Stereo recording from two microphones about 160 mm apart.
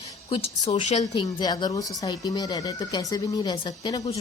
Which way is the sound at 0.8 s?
45° left (ahead or behind).